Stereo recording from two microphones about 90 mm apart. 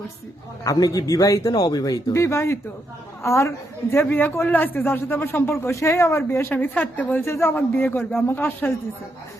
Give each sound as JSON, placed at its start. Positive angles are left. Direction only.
{"t": 0.6, "sound": "speech", "side_deg": 40}
{"t": 4.1, "sound": "speech", "side_deg": 20}
{"t": 6.5, "sound": "speech", "side_deg": 15}